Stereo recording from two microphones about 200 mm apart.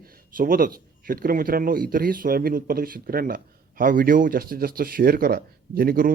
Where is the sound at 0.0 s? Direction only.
45° right (ahead or behind).